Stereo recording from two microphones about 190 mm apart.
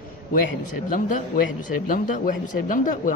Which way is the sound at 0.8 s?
45° left (ahead or behind).